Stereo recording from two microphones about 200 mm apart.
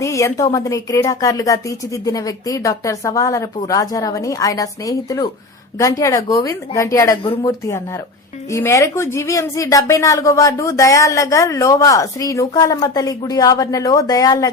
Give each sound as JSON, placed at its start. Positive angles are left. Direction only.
{"t": 0.0, "sound": "a woman's voice", "side_deg": 15}
{"t": 8.5, "sound": "a woman's voice", "side_deg": 15}